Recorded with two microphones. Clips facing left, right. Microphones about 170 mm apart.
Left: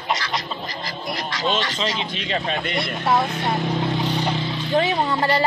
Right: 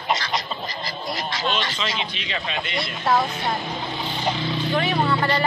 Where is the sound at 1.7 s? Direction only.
35° left (ahead or behind).